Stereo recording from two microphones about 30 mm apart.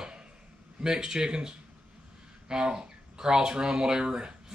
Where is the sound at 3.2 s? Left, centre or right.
Right.